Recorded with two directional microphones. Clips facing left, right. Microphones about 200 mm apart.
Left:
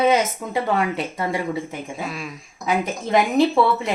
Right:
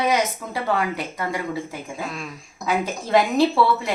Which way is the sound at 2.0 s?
5° left (ahead or behind).